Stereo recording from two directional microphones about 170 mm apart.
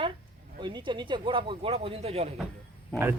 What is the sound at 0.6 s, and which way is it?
Speech, 25° right (ahead or behind).